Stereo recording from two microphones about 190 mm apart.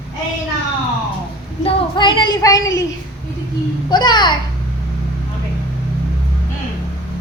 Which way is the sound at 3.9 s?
25° left (ahead or behind).